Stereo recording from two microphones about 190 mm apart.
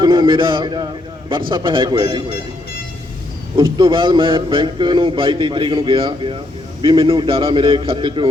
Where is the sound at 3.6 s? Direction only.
25° right (ahead or behind).